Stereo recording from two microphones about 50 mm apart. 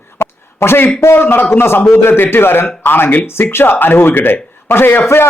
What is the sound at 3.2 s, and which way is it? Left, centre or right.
A man's voice, left.